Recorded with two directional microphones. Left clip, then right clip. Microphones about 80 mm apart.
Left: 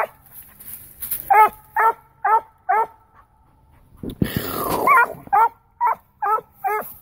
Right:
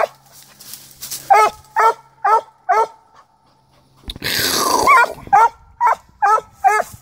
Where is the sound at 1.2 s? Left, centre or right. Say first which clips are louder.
Right 2 dB; right.